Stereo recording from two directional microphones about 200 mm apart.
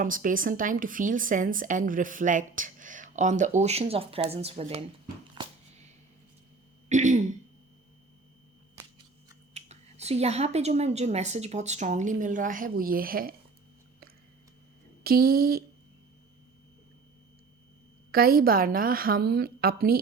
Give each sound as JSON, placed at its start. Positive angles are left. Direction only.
{"t": 0.0, "sound": "speech", "side_deg": -40}
{"t": 5.3, "sound": "a sound", "side_deg": -25}
{"t": 6.8, "sound": "throat clearing", "side_deg": -35}
{"t": 9.6, "sound": "speech", "side_deg": -30}
{"t": 15.0, "sound": "a woman's voice", "side_deg": -50}
{"t": 18.1, "sound": "a woman's voice", "side_deg": -50}